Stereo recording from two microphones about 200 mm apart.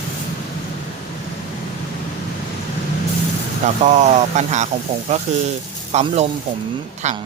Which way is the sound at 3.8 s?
35° right (ahead or behind).